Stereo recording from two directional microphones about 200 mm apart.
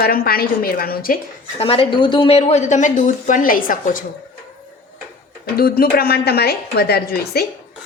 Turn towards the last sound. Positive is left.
turn(degrees=50)  # may be behind; listen again after turning